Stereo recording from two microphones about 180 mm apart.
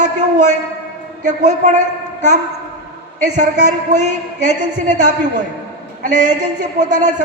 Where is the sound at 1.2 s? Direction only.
40° right (ahead or behind).